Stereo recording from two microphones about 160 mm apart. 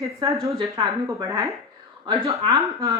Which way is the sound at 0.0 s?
20° right (ahead or behind).